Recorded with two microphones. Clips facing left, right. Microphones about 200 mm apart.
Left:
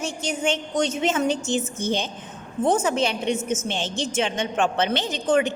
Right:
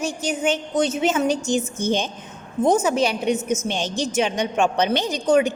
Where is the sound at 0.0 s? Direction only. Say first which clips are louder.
Right 3 dB; 10° right (ahead or behind).